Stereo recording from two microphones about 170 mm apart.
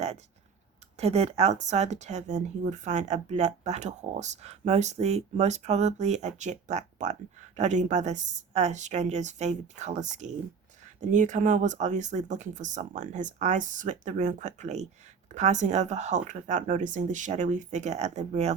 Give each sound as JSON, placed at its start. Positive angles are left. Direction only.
{"t": 0.9, "sound": "speech", "side_deg": -40}